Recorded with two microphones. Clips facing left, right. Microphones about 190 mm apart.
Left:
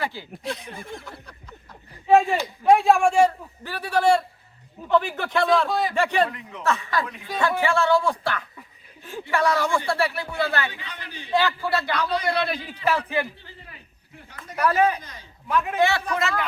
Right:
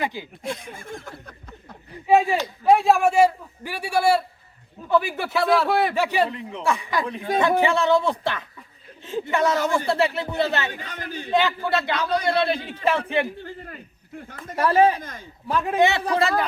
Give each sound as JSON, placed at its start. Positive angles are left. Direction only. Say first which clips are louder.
{"t": 0.0, "sound": "a man's voice", "louder": "right 2 dB", "side_deg": -15}
{"t": 0.4, "sound": "speech", "louder": "even", "side_deg": -50}
{"t": 2.0, "sound": "a man's voice", "louder": "even", "side_deg": -5}
{"t": 5.6, "sound": "a man's voice", "louder": "right 4 dB", "side_deg": -60}
{"t": 5.9, "sound": "a man's voice", "louder": "even", "side_deg": -5}
{"t": 6.2, "sound": "speech", "louder": "right 3 dB", "side_deg": -25}
{"t": 6.6, "sound": "a man's voice", "louder": "even", "side_deg": -15}
{"t": 10.7, "sound": "speech", "louder": "right 6 dB", "side_deg": -45}
{"t": 11.3, "sound": "speech", "louder": "right 1 dB", "side_deg": -20}
{"t": 13.2, "sound": "a sound", "louder": "right 8 dB", "side_deg": -50}
{"t": 14.5, "sound": "speech", "louder": "right 3 dB", "side_deg": -30}
{"t": 15.8, "sound": "speech", "louder": "right 3 dB", "side_deg": -20}
{"t": 16.0, "sound": "speech", "louder": "right 4 dB", "side_deg": -30}